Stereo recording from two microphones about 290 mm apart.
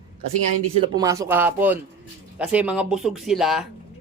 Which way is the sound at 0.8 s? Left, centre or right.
Centre.